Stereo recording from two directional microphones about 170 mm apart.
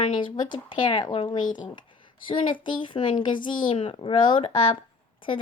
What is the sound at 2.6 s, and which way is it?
A woman's voice, 30° left (ahead or behind).